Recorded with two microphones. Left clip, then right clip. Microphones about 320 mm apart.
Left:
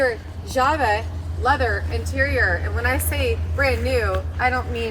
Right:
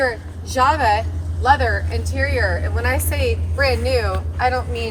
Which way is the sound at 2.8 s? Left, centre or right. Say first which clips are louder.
Right 3 dB; right.